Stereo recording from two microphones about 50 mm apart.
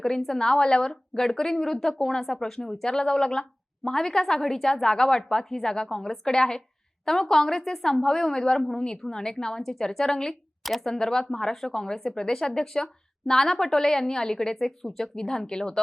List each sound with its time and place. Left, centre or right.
0.0 s speech: centre
10.6 s speech: centre
10.9 s speech: centre